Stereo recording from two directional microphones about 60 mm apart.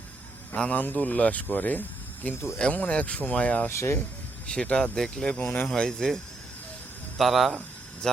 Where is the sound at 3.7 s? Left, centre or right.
Left.